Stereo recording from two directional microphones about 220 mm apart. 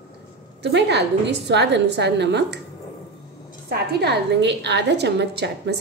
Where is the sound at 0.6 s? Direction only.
50° right (ahead or behind).